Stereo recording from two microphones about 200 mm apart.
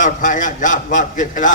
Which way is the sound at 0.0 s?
40° left (ahead or behind).